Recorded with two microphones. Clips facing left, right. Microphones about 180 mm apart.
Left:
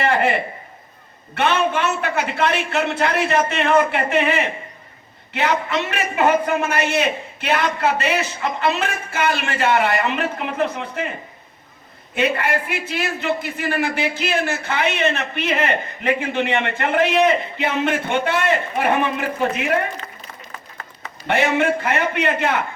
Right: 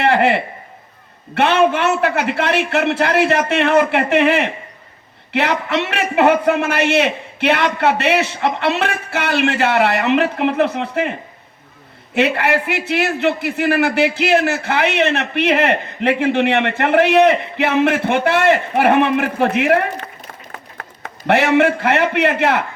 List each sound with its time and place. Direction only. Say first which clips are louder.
0.0 s a sound: right 4 dB; 65° right (ahead or behind)
1.4 s a man's voice: right 5 dB; 65° right (ahead or behind)
12.1 s a man's voice: right 4 dB; 70° right (ahead or behind)